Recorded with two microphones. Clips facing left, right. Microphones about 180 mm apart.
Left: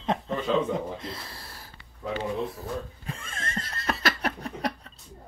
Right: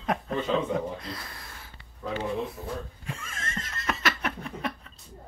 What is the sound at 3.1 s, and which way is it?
Laughter, 35° left (ahead or behind).